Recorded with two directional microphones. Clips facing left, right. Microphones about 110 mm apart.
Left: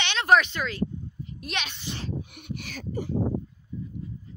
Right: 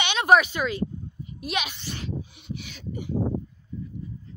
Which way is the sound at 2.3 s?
50° left (ahead or behind).